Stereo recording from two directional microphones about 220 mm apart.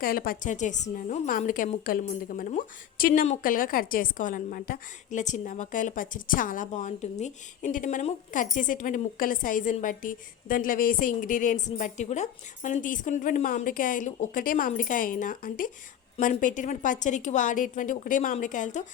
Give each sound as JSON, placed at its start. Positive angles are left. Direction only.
{"t": 0.0, "sound": "a woman's voice", "side_deg": 40}